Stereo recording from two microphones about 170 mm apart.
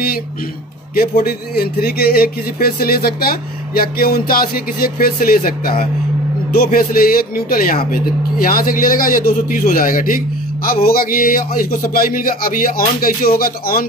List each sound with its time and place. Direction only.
0.9 s a man's voice: 60° left (ahead or behind)